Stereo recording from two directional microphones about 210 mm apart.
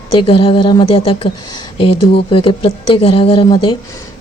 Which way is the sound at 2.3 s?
25° left (ahead or behind).